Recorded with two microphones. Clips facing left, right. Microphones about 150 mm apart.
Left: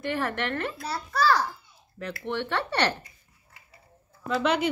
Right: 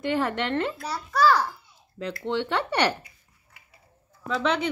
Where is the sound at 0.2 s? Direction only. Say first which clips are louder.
Right 3 dB; 20° right (ahead or behind).